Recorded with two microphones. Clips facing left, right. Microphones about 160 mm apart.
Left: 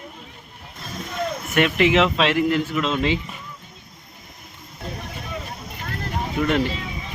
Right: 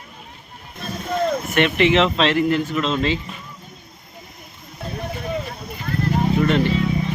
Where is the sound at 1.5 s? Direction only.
5° left (ahead or behind).